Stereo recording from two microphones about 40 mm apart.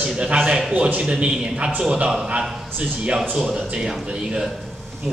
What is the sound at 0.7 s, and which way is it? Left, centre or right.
Speech, right.